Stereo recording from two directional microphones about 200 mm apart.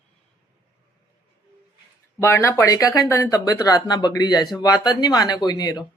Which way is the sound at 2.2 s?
10° left (ahead or behind).